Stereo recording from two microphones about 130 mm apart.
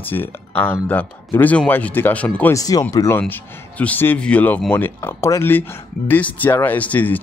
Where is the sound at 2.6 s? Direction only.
30° left (ahead or behind); by 7.2 s 15° left (ahead or behind).